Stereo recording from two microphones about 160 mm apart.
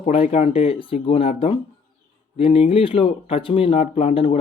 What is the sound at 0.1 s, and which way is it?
Speech, 45° left (ahead or behind).